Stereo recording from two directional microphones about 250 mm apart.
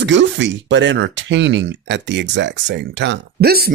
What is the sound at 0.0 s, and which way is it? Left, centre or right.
Speech, right.